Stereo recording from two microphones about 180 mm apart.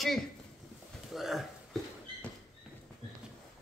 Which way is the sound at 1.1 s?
Centre (ahead or behind).